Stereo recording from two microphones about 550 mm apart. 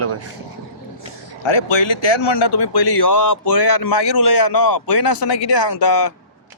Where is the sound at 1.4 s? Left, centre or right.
Left.